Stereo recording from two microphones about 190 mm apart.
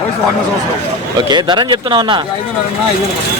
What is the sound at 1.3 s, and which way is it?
Speech, 25° right (ahead or behind).